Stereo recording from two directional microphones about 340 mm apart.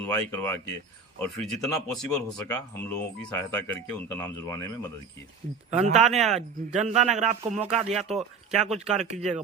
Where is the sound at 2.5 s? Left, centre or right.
Centre.